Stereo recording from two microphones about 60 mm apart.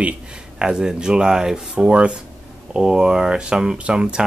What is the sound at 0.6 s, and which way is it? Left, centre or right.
Speech, centre.